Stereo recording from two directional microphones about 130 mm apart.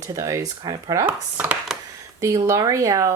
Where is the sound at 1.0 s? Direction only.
15° right (ahead or behind).